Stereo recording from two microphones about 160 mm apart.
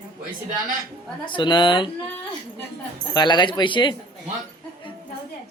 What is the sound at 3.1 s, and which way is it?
Speech, 25° left (ahead or behind).